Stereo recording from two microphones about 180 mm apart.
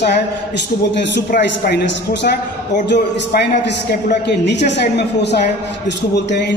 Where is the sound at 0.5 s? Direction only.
75° left (ahead or behind).